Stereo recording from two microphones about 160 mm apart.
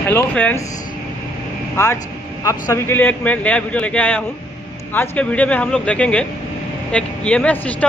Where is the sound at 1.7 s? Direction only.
15° left (ahead or behind).